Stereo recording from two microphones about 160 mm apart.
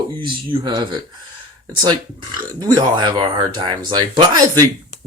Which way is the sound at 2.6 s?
25° right (ahead or behind).